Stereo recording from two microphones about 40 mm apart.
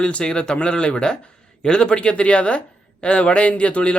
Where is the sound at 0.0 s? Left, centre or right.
Left.